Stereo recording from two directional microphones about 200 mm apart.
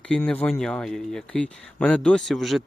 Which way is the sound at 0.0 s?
5° left (ahead or behind).